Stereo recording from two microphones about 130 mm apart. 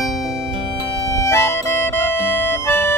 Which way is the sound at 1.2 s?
20° left (ahead or behind).